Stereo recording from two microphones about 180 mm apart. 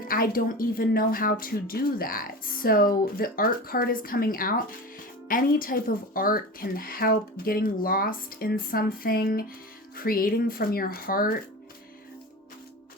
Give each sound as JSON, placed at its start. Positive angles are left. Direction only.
{"t": 0.0, "sound": "speech", "side_deg": 55}